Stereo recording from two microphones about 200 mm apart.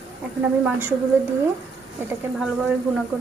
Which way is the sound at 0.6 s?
10° right (ahead or behind).